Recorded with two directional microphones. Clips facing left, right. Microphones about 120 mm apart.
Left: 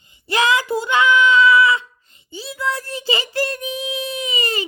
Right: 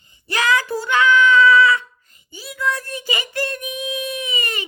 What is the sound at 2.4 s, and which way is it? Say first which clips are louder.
Child singing: even; 30° left (ahead or behind).